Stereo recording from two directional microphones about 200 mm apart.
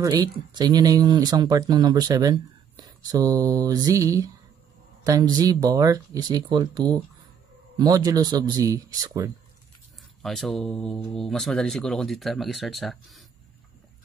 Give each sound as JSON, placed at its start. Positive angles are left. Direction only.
{"t": 0.0, "sound": "speech", "side_deg": -20}
{"t": 10.2, "sound": "speech", "side_deg": 0}